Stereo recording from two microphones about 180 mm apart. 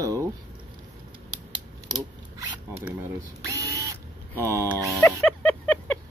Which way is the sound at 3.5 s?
20° right (ahead or behind).